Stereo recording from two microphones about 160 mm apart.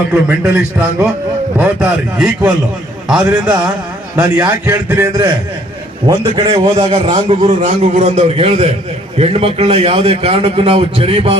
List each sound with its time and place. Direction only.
0.1 s a man's voice: 10° right (ahead or behind)
6.1 s a man's voice: 25° right (ahead or behind)
6.9 s a man's voice: 45° right (ahead or behind)